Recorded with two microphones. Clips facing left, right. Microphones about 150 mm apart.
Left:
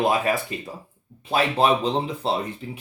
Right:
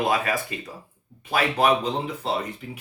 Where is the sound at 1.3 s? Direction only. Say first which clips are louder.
Left 1 dB; 25° left (ahead or behind).